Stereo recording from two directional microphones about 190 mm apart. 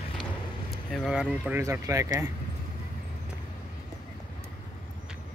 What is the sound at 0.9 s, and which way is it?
Speech, centre (ahead or behind).